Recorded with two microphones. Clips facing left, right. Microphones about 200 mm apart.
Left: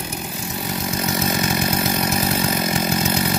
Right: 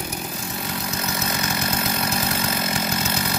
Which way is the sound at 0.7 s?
20° left (ahead or behind).